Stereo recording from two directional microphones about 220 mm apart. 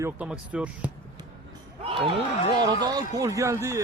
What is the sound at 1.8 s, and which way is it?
A man's voice, 25° right (ahead or behind).